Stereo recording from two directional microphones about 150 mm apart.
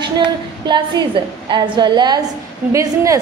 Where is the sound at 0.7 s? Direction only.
30° right (ahead or behind).